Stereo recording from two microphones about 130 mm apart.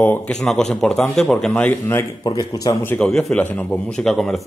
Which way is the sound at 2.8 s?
5° left (ahead or behind).